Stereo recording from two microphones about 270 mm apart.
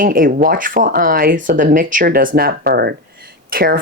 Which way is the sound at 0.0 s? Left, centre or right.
Right.